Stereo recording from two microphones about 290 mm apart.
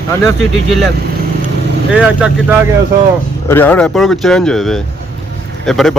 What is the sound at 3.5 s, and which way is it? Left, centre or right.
Speech, centre.